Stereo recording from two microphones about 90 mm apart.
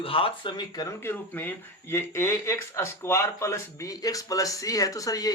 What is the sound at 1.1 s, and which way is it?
Speech, 20° left (ahead or behind).